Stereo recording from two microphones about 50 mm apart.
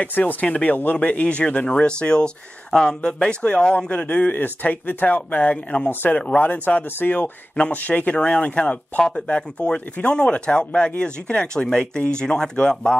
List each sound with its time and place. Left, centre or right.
0.0 s speech: left; by 12.9 s centre